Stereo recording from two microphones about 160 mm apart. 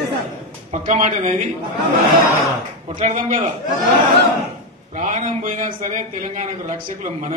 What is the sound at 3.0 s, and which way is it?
Speech, 45° right (ahead or behind).